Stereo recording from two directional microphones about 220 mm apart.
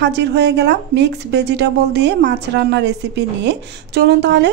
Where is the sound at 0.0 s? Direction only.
50° right (ahead or behind).